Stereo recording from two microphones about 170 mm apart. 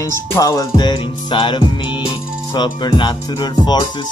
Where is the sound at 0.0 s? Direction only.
20° left (ahead or behind).